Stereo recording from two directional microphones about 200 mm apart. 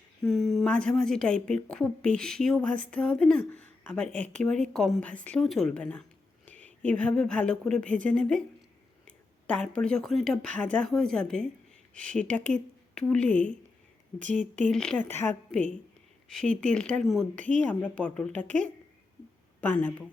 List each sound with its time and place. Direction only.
0.2 s speech: centre (ahead or behind)
14.2 s speech: 40° right (ahead or behind)
14.7 s a woman's voice: 5° left (ahead or behind)